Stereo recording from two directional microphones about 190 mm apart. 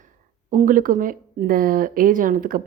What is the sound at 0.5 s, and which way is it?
A woman's voice, 45° right (ahead or behind).